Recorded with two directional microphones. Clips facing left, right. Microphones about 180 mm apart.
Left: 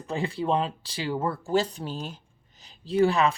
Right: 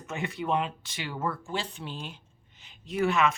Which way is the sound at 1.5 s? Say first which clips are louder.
Left 9 dB; 40° left (ahead or behind).